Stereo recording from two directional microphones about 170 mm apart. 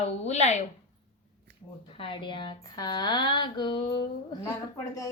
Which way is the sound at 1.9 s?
30° left (ahead or behind).